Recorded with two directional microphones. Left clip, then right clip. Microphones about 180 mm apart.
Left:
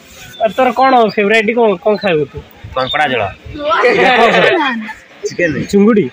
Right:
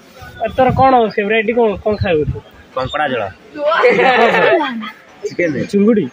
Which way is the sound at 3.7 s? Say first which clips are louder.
Left 2 dB; 55° left (ahead or behind).